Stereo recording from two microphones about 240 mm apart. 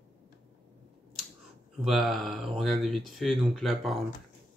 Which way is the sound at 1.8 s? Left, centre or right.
Centre.